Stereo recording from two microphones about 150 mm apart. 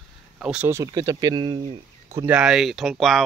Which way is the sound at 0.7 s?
20° right (ahead or behind).